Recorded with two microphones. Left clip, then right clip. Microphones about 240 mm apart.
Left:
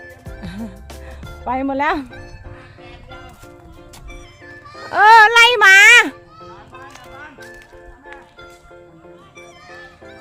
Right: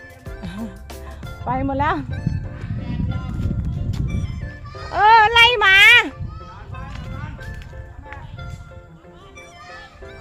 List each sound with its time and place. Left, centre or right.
0.3 s music: centre
1.5 s speech: centre
2.0 s music: centre
3.9 s music: centre
4.9 s speech: centre
6.8 s music: centre